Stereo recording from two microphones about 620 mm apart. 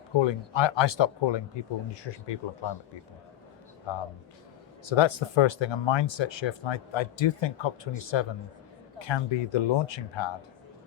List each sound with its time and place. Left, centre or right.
0.2 s speech: left
4.9 s speech: left